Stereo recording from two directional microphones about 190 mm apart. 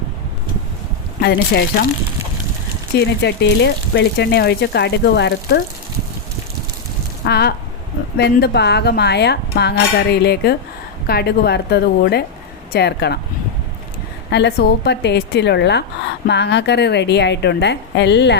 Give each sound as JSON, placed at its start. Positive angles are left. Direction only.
{"t": 1.2, "sound": "speech", "side_deg": 55}
{"t": 3.0, "sound": "speech", "side_deg": 65}
{"t": 7.3, "sound": "speech", "side_deg": 55}
{"t": 14.3, "sound": "speech", "side_deg": 65}